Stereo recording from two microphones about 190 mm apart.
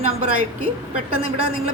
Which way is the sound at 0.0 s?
35° right (ahead or behind).